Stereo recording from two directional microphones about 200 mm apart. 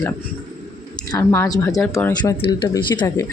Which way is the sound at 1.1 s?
15° left (ahead or behind).